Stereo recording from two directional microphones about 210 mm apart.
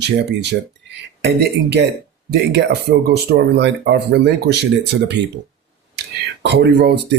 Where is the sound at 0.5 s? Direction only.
65° right (ahead or behind).